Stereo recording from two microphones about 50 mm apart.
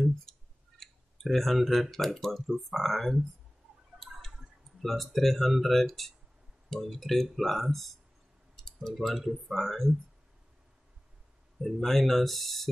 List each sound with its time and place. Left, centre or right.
0.0 s speech: centre
4.8 s speech: centre
11.6 s speech: centre